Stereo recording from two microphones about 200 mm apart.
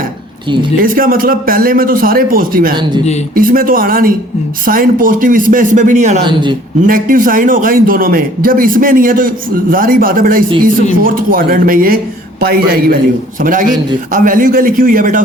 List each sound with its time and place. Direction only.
0.8 s a man's voice: 45° right (ahead or behind)
6.2 s speech: 25° right (ahead or behind)
6.8 s a man's voice: 45° right (ahead or behind)